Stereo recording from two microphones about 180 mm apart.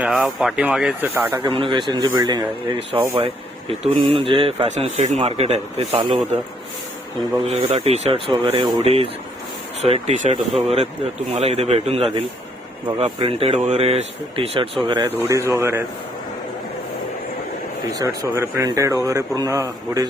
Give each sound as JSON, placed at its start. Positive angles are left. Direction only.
{"t": 0.0, "sound": "speech", "side_deg": -5}
{"t": 1.5, "sound": "a man's voice", "side_deg": -25}
{"t": 7.4, "sound": "a man's voice", "side_deg": -35}
{"t": 15.3, "sound": "speech", "side_deg": -15}
{"t": 17.9, "sound": "speech", "side_deg": -20}